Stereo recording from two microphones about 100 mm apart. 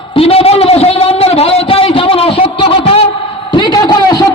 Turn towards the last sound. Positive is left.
turn(degrees=45)  # may be behind; listen again after turning